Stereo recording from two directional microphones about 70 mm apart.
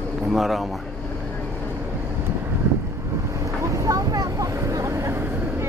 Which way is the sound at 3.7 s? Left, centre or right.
Right.